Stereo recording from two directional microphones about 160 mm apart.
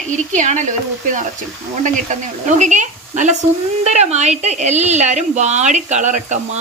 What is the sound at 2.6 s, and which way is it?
A woman's voice, 50° right (ahead or behind).